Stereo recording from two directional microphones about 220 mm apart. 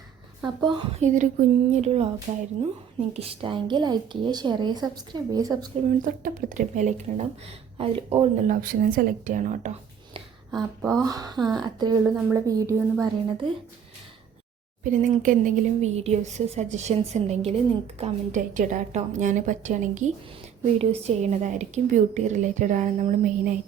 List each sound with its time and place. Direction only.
0.4 s a woman's voice: 20° right (ahead or behind)
1.0 s a woman's voice: 35° right (ahead or behind); by 5.5 s 15° right (ahead or behind)
6.1 s a woman's voice: 35° right (ahead or behind)
11.0 s a woman's voice: 15° right (ahead or behind)
12.0 s a woman's voice: 5° right (ahead or behind)
12.5 s a woman's voice: 15° right (ahead or behind)
14.8 s a woman's voice: 35° right (ahead or behind)